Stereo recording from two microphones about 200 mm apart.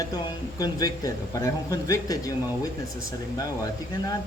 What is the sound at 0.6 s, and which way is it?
Speech, 20° left (ahead or behind).